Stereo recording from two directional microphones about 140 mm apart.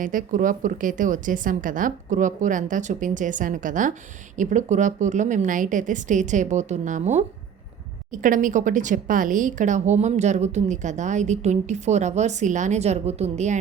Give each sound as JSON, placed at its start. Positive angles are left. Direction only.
{"t": 0.0, "sound": "a woman's voice", "side_deg": -70}
{"t": 8.1, "sound": "a woman's voice", "side_deg": -70}